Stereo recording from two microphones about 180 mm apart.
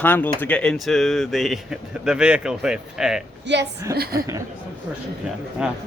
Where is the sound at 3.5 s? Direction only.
75° right (ahead or behind).